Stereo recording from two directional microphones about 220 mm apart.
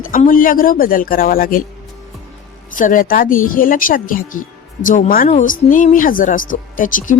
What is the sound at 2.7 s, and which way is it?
Speech, 35° left (ahead or behind).